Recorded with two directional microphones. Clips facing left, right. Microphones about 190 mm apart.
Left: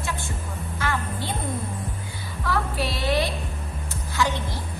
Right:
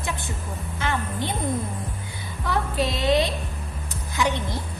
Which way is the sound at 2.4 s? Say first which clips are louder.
Right 2 dB; 20° right (ahead or behind).